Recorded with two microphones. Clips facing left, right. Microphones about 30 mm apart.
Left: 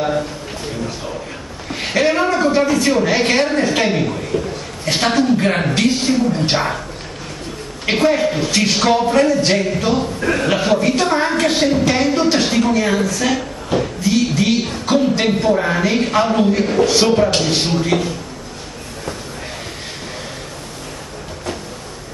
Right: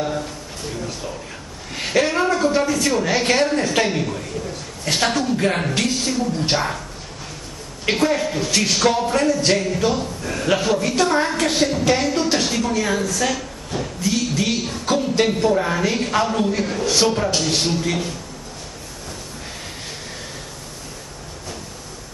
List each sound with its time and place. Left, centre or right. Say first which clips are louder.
0.0 s a sound: left 5 dB; left
1.7 s a woman's voice: left 3 dB; centre
7.8 s a woman's voice: left 4 dB; centre
10.2 s a man's voice: left 7 dB; left
10.5 s a woman's voice: even; left
13.7 s a sound: left 6 dB; centre
14.6 s a woman's voice: left 5 dB; left